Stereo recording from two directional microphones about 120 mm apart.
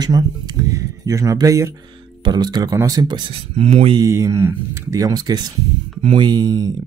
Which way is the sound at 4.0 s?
25° right (ahead or behind).